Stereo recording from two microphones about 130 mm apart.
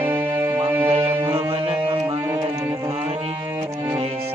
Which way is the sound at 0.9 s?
45° right (ahead or behind).